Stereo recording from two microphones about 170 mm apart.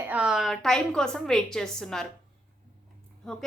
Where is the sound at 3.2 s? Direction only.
Centre (ahead or behind).